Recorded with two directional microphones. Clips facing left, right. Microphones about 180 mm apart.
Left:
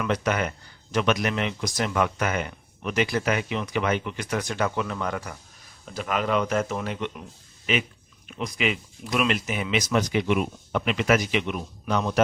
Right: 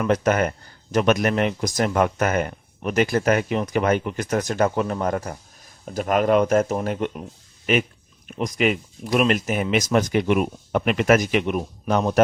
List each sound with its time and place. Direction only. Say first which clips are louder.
0.0 s speech: right 5 dB; 45° right (ahead or behind)